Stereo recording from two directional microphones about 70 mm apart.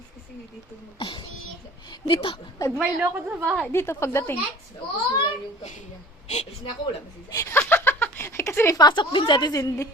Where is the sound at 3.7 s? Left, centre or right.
Left.